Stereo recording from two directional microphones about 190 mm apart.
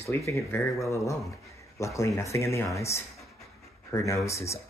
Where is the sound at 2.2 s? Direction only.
15° left (ahead or behind).